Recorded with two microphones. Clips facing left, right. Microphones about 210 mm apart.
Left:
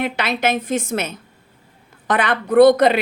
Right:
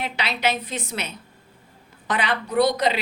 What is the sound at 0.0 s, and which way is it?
A woman's voice, 50° left (ahead or behind).